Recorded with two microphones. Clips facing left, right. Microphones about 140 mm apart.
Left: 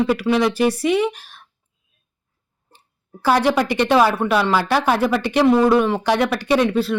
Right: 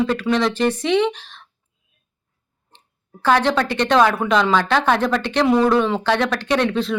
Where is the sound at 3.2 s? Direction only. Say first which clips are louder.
Left 1 dB; 10° left (ahead or behind).